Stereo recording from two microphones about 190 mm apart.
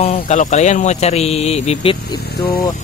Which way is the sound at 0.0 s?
35° left (ahead or behind).